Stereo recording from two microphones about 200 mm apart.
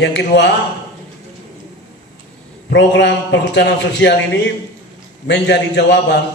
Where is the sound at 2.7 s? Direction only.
60° left (ahead or behind).